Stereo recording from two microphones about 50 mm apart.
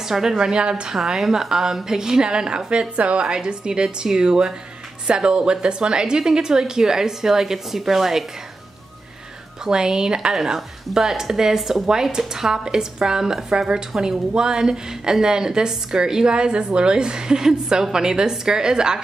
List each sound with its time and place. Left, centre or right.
0.0 s speech: centre
0.9 s speech: centre
9.7 s speech: centre